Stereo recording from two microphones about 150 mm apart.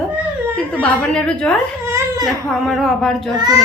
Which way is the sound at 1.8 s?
20° right (ahead or behind).